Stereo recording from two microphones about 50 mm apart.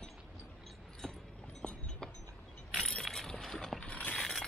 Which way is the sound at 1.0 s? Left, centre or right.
Centre.